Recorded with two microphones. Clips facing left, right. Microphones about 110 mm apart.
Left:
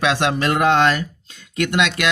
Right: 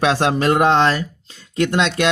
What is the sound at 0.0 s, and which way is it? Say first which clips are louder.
Speech: right 2 dB; 35° right (ahead or behind).